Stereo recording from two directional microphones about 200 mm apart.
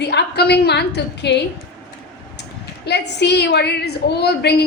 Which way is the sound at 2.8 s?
55° left (ahead or behind).